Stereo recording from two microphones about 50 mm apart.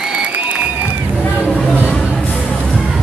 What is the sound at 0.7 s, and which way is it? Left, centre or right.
Run, right.